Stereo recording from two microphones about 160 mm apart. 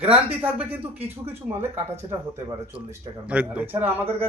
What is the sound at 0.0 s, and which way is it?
Speech, 10° right (ahead or behind).